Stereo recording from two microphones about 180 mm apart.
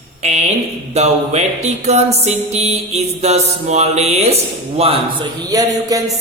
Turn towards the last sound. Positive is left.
turn(degrees=-20)  # may be behind; listen again after turning